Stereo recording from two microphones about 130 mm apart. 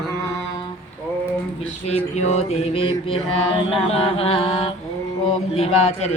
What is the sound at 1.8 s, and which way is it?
Mantra, 55° left (ahead or behind).